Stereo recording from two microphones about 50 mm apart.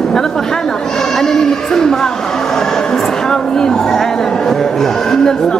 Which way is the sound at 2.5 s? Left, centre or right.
Centre.